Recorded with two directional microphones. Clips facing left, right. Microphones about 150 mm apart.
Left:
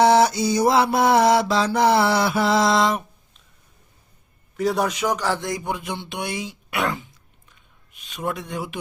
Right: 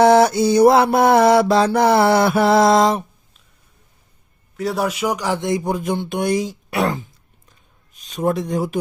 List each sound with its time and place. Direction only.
0.0 s mantra: 50° right (ahead or behind)
4.5 s a man's voice: centre (ahead or behind); by 5.6 s 25° right (ahead or behind)
5.6 s speech: 40° right (ahead or behind)
7.5 s a sound: 40° right (ahead or behind)